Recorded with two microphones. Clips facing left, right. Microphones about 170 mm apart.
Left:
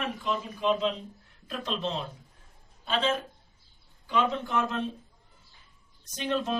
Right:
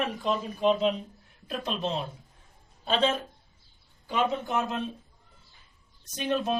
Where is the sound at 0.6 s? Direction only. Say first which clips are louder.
Right 3 dB; 15° right (ahead or behind).